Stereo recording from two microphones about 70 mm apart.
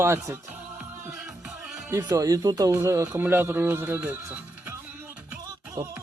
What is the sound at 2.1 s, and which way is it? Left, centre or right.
Speech, right.